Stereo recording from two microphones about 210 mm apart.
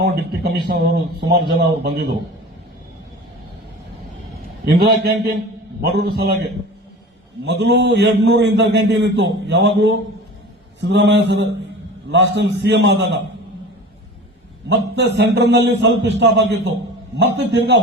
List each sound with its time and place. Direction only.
0.0 s a man's voice: 50° right (ahead or behind)
4.6 s a man's voice: 50° right (ahead or behind)
14.7 s a man's voice: 60° right (ahead or behind)